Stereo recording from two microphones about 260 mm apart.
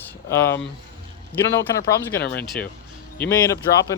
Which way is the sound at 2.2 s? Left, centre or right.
Left.